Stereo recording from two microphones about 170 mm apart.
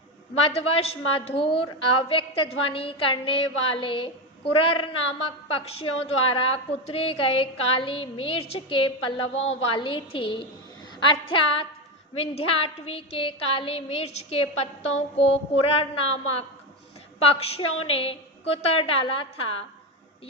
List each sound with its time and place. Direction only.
0.5 s a woman's voice: 35° left (ahead or behind)